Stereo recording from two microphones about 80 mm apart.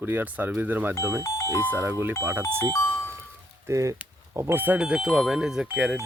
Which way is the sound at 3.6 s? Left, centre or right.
Right.